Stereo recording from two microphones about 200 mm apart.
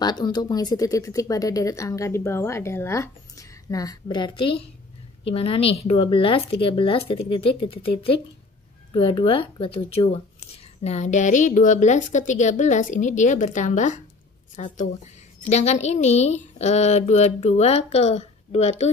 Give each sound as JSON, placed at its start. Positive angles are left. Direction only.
{"t": 0.0, "sound": "a woman's voice", "side_deg": 20}